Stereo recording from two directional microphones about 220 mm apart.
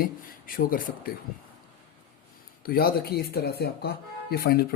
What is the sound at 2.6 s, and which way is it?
Speech, 45° left (ahead or behind).